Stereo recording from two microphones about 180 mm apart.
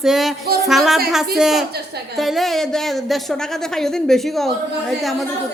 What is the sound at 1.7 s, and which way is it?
Speech, 65° right (ahead or behind).